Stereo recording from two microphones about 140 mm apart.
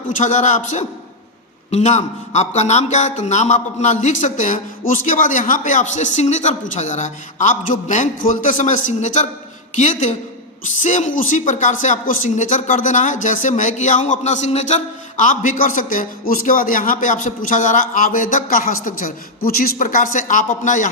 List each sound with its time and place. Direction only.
0.2 s a man's voice: 60° left (ahead or behind)